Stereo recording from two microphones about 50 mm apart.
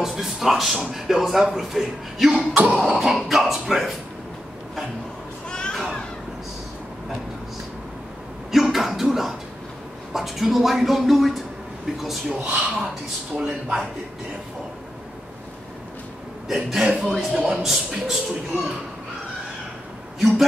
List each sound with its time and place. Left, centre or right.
0.0 s a man's voice: centre
2.3 s speech: right
2.8 s a man's voice: centre
5.5 s a sound: centre
8.7 s a sound: centre
10.1 s a man's voice: centre
12.3 s speech: centre
16.5 s a man's voice: centre